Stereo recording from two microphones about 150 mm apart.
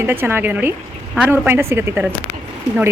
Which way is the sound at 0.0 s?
15° right (ahead or behind).